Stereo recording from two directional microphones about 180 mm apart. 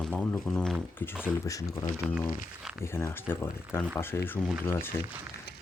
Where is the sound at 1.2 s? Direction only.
20° left (ahead or behind).